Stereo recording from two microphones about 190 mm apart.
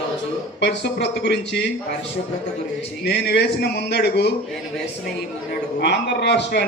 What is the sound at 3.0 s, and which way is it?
Speech, 60° left (ahead or behind).